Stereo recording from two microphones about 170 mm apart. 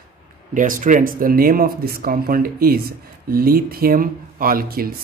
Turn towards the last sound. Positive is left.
turn(degrees=-60)  # may be behind; listen again after turning